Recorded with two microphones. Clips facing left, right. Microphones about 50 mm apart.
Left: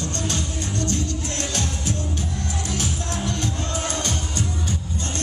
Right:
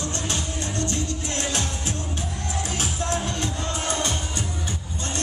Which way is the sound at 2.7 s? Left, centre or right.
Right.